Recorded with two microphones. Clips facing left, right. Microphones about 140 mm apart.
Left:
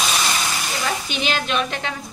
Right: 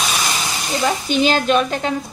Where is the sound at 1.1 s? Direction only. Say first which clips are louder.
Right 10 dB; 40° right (ahead or behind).